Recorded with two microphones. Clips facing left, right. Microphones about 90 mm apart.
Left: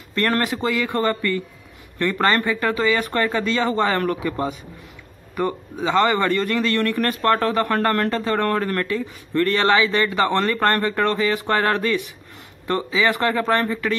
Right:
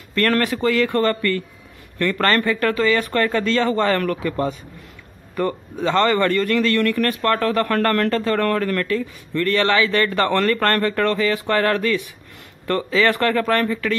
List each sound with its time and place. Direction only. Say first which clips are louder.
0.1 s a man's voice: right 2 dB; 20° left (ahead or behind)